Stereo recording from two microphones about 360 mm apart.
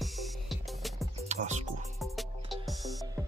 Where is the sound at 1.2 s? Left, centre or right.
Centre.